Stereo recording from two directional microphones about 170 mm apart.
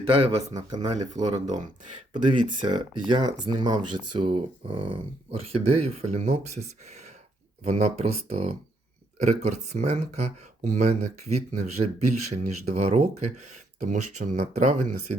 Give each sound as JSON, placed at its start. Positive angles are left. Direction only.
{"t": 0.0, "sound": "speech", "side_deg": -35}
{"t": 1.2, "sound": "speech", "side_deg": -40}
{"t": 2.6, "sound": "speech", "side_deg": -25}